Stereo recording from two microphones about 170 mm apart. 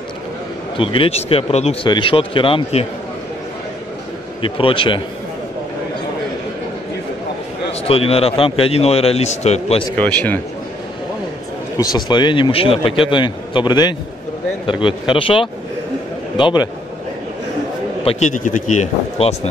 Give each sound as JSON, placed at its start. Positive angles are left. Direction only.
{"t": 0.7, "sound": "speech", "side_deg": 30}
{"t": 4.4, "sound": "speech", "side_deg": 30}
{"t": 7.8, "sound": "speech", "side_deg": 35}
{"t": 9.9, "sound": "a man's voice", "side_deg": 5}
{"t": 11.8, "sound": "a man's voice", "side_deg": 25}
{"t": 18.0, "sound": "a man's voice", "side_deg": 45}